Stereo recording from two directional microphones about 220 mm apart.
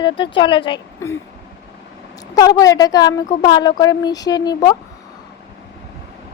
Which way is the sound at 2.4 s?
15° left (ahead or behind).